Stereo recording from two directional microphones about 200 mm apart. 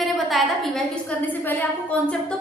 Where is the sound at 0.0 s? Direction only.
Centre (ahead or behind).